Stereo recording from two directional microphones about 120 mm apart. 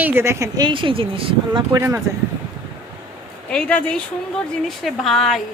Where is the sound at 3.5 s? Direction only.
10° left (ahead or behind).